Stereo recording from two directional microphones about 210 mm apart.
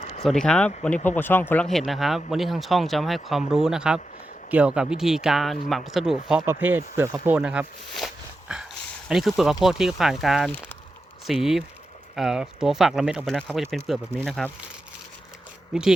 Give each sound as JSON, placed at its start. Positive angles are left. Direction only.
{"t": 0.0, "sound": "a sound", "side_deg": 30}
{"t": 0.3, "sound": "speech", "side_deg": 5}
{"t": 15.7, "sound": "speech", "side_deg": -5}